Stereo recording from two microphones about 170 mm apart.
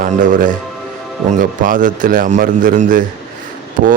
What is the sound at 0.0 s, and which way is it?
A man's voice, 50° right (ahead or behind).